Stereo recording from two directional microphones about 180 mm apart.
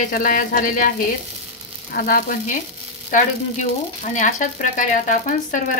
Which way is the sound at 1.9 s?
50° left (ahead or behind).